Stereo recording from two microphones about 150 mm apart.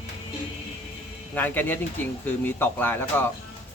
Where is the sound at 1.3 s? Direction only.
10° left (ahead or behind).